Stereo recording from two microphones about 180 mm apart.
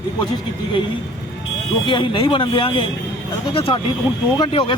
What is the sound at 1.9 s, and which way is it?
Speech, 30° left (ahead or behind).